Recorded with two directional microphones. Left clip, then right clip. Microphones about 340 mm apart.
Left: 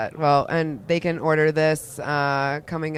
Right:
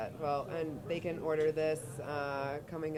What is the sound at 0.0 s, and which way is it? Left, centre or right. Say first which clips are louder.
Speech: left 16 dB; left.